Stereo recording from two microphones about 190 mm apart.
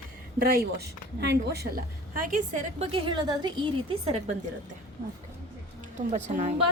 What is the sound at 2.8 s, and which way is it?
Speech, 25° right (ahead or behind).